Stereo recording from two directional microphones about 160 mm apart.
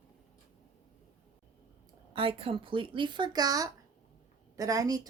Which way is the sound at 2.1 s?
35° right (ahead or behind).